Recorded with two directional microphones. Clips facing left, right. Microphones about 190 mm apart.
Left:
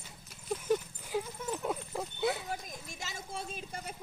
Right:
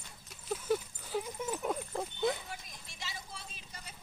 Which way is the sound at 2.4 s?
45° left (ahead or behind).